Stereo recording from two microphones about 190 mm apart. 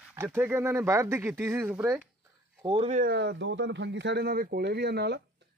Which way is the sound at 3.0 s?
55° right (ahead or behind).